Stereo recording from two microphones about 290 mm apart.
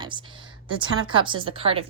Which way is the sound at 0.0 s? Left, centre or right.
Centre.